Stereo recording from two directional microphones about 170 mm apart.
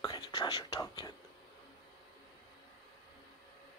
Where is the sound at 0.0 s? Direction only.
25° left (ahead or behind).